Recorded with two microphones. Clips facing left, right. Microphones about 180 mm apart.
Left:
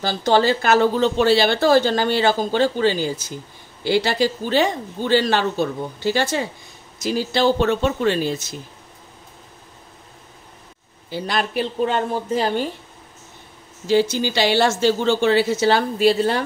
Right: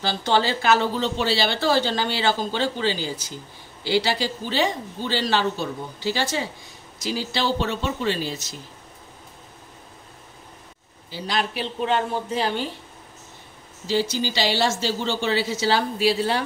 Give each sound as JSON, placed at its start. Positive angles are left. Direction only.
{"t": 0.0, "sound": "speech", "side_deg": 45}
{"t": 11.1, "sound": "speech", "side_deg": 55}
{"t": 13.8, "sound": "a woman's voice", "side_deg": 55}